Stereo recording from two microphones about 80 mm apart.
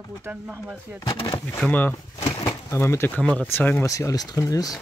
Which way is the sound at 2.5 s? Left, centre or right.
Left.